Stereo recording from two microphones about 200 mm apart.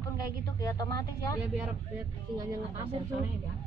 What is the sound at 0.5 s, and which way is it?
Speech, 20° left (ahead or behind).